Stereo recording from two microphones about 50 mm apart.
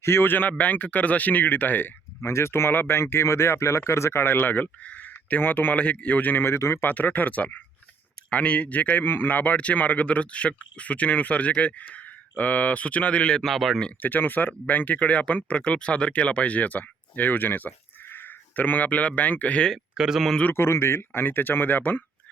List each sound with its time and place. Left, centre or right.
0.0 s speech: left
0.5 s speech: left
2.2 s speech: left
4.4 s speech: left
4.9 s a sound: left
5.4 s speech: left
13.4 s speech: centre
14.0 s speech: left
20.0 s speech: centre
20.5 s speech: left
21.1 s speech: left